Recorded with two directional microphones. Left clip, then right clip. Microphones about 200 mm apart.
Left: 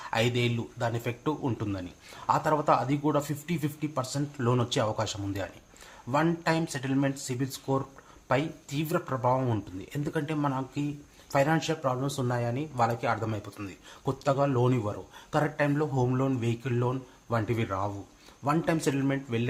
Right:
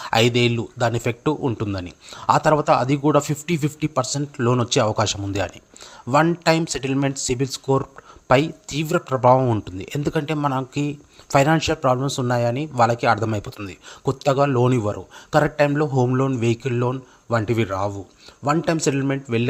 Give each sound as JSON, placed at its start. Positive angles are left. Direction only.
{"t": 0.0, "sound": "speech", "side_deg": -40}